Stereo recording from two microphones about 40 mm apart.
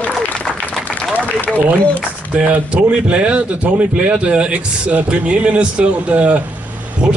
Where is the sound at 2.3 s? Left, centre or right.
Right.